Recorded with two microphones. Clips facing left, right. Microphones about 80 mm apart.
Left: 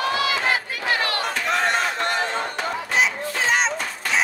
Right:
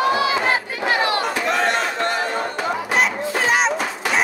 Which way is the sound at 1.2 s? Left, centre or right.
Centre.